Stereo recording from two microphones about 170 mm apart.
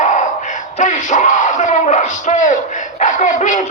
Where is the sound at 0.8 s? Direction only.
45° left (ahead or behind).